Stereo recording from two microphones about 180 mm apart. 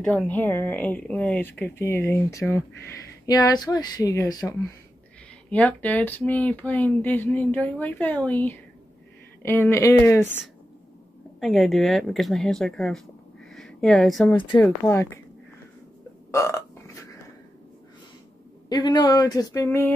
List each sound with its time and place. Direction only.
0.0 s speech: 5° left (ahead or behind)
5.5 s speech: 10° left (ahead or behind)
11.3 s speech: centre (ahead or behind)
16.3 s burping: 15° left (ahead or behind)
18.7 s speech: 25° left (ahead or behind)